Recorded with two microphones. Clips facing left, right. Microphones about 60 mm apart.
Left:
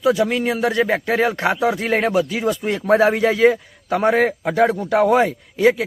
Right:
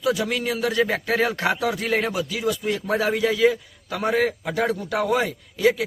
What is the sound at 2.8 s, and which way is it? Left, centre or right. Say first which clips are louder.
Speech: left 10 dB; left.